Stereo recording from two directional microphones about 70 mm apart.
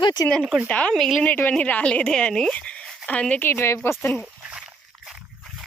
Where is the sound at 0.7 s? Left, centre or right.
Centre.